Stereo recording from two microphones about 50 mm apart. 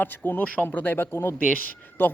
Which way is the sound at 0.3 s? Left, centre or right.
Left.